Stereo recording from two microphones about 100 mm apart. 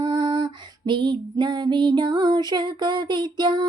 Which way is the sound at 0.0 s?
45° right (ahead or behind).